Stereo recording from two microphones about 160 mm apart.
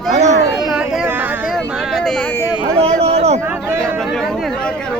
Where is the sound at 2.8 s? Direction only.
40° right (ahead or behind).